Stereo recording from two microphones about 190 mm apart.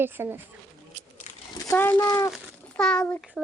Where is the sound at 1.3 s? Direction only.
40° left (ahead or behind).